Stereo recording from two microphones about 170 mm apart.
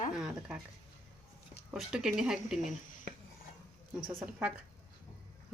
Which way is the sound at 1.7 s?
Centre (ahead or behind).